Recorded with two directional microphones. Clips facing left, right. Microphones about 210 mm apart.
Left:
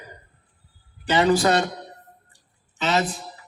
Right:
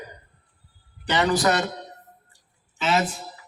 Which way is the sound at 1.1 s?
25° left (ahead or behind).